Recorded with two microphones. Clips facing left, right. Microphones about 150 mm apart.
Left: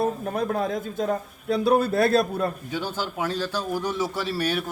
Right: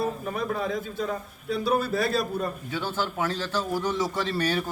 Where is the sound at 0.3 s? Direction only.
55° left (ahead or behind).